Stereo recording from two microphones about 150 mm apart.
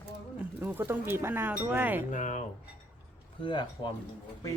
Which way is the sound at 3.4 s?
30° left (ahead or behind).